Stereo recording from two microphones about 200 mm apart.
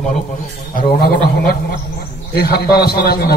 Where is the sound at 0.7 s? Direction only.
50° left (ahead or behind).